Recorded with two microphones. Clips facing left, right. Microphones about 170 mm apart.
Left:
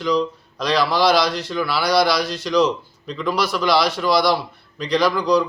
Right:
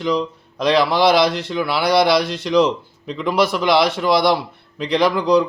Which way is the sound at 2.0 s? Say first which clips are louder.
Right 3 dB; 60° right (ahead or behind).